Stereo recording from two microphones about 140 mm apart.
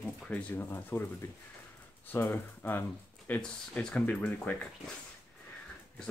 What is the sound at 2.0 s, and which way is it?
Speech, 15° left (ahead or behind).